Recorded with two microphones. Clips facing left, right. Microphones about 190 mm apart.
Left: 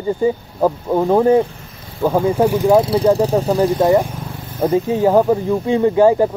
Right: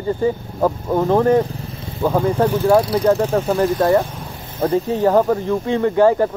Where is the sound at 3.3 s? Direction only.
15° left (ahead or behind).